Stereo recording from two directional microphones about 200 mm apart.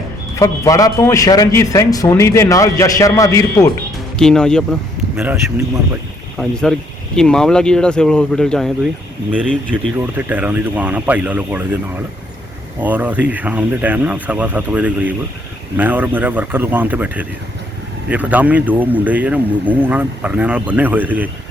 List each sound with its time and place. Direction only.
0.3 s a man's voice: 15° left (ahead or behind)
4.2 s speech: 5° left (ahead or behind)
5.1 s speech: 10° right (ahead or behind)
6.3 s speech: centre (ahead or behind)
10.2 s speech: 10° right (ahead or behind)
12.8 s speech: 10° right (ahead or behind)